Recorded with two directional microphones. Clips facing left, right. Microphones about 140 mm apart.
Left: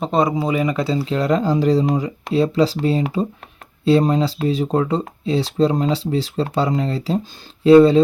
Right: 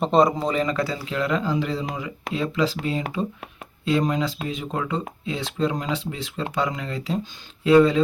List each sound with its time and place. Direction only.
0.0 s speech: centre (ahead or behind); by 8.0 s 30° left (ahead or behind)